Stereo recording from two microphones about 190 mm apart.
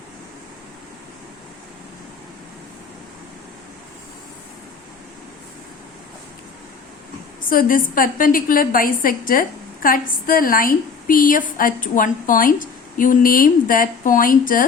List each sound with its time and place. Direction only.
7.5 s a woman's voice: 45° left (ahead or behind)